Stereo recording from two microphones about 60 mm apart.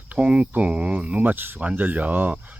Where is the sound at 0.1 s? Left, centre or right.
Right.